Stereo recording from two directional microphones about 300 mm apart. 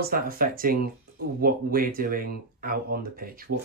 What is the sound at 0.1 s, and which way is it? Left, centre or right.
Speech, right.